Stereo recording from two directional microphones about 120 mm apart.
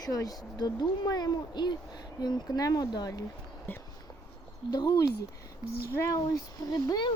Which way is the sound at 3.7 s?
20° left (ahead or behind).